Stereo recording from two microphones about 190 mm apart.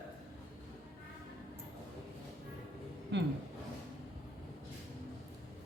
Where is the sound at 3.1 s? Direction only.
75° right (ahead or behind).